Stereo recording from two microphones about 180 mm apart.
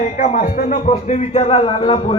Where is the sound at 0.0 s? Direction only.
45° left (ahead or behind).